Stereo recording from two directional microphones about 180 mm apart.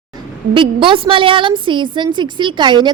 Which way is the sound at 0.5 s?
30° right (ahead or behind).